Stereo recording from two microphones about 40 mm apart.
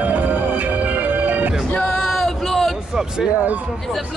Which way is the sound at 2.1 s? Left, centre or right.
Centre.